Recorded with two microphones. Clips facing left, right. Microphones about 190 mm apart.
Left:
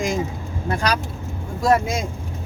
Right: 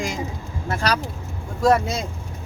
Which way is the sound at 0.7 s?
10° left (ahead or behind).